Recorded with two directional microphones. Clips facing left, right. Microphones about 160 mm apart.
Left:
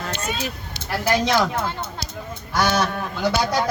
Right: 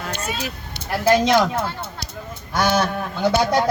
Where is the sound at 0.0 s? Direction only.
10° right (ahead or behind).